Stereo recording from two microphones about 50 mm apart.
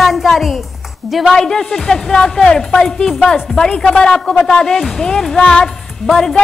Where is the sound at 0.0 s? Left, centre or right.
Centre.